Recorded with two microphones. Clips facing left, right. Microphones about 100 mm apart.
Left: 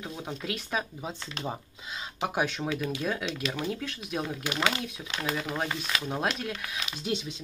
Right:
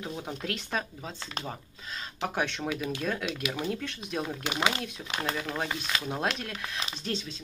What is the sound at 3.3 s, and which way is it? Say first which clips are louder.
Speech: even; 5° right (ahead or behind).